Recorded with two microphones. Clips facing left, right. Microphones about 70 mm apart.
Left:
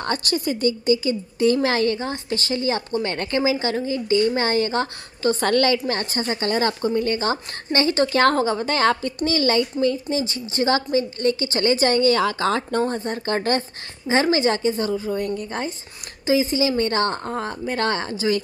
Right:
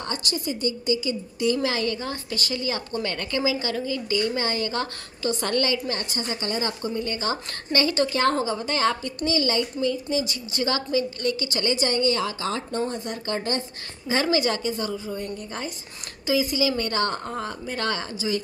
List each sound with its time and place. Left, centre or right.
0.0 s a woman's voice: left
8.1 s speech: left
10.0 s a woman's voice: left
12.8 s a woman's voice: left
13.4 s speech: left
14.0 s a woman's voice: left
15.1 s a woman's voice: left
16.3 s a woman's voice: left